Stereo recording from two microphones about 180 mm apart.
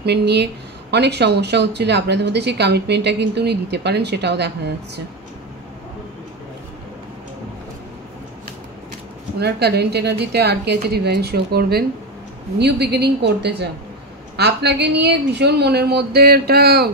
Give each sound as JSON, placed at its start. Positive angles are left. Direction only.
{"t": 0.0, "sound": "a woman's voice", "side_deg": -70}
{"t": 9.4, "sound": "a woman's voice", "side_deg": -65}